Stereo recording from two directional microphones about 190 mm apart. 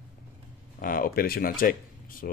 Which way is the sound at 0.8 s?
50° left (ahead or behind).